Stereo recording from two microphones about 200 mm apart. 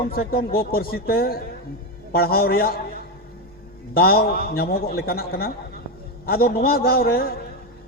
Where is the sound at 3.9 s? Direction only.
50° left (ahead or behind).